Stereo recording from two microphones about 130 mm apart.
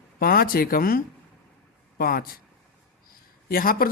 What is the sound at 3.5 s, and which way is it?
Speech, 90° left.